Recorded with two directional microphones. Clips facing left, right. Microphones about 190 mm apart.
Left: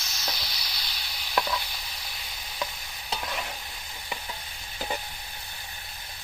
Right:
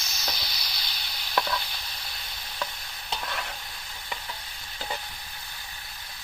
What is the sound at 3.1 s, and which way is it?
Stir, 10° left (ahead or behind).